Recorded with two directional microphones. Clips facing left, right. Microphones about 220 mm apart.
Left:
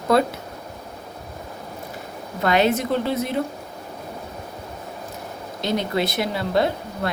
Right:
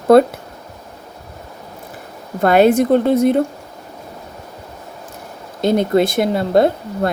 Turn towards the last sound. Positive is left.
turn(degrees=-50)  # may be behind; listen again after turning